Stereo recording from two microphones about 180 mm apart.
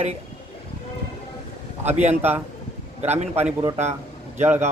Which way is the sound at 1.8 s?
40° right (ahead or behind).